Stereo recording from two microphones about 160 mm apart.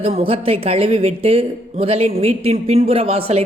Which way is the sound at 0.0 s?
35° right (ahead or behind).